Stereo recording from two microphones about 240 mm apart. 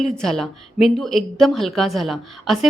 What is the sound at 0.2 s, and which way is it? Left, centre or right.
A woman's voice, centre.